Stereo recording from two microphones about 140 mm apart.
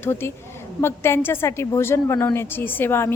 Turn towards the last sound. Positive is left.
turn(degrees=15)  # may be behind; listen again after turning